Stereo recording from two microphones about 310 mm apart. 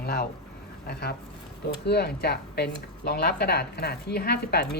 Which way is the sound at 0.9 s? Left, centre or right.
Left.